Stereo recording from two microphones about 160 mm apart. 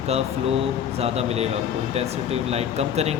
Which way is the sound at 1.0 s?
40° right (ahead or behind).